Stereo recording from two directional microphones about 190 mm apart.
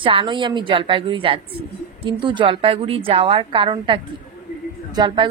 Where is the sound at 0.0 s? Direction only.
25° right (ahead or behind).